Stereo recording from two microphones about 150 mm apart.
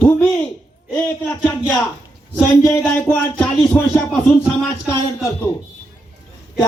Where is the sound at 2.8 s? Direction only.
10° left (ahead or behind).